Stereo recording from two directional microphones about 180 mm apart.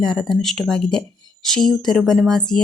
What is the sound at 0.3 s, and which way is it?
Speech, centre (ahead or behind).